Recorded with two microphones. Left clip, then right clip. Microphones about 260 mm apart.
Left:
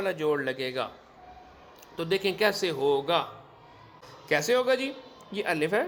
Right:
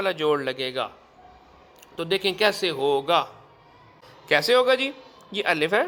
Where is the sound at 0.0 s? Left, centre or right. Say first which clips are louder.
Right 4 dB; right.